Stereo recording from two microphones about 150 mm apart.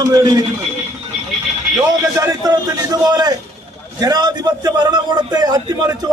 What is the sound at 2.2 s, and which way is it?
A man's voice, 20° right (ahead or behind).